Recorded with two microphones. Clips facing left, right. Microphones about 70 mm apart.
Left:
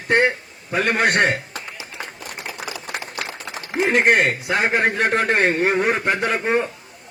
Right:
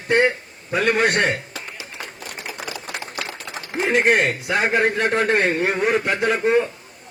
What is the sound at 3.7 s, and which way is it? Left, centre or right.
A man's voice, left.